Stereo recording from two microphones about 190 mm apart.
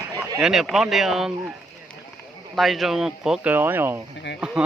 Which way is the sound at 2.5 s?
Centre (ahead or behind).